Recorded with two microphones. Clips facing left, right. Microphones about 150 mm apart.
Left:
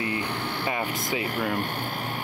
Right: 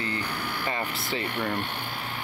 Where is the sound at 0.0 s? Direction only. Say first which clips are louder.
Left 3 dB; 20° left (ahead or behind).